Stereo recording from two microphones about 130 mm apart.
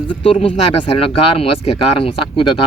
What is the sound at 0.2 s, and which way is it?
Speech, 50° left (ahead or behind).